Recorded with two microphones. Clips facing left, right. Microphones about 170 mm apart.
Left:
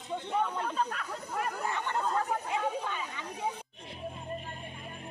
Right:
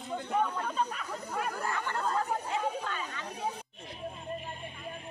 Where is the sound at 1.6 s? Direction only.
20° left (ahead or behind).